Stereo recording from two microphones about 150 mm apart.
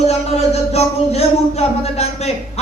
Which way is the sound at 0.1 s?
45° left (ahead or behind).